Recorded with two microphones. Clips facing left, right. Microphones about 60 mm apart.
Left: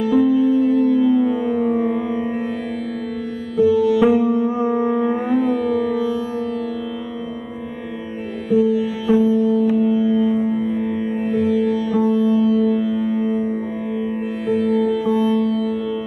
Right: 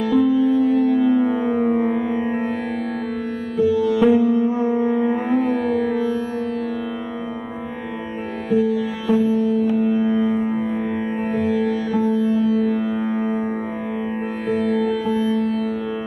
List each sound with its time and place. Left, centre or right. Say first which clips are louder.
0.0 s music: left 1 dB; right
3.5 s music: left 3 dB; right
4.5 s music: even; left
4.8 s music: left 1 dB; right
8.5 s music: left 3 dB; right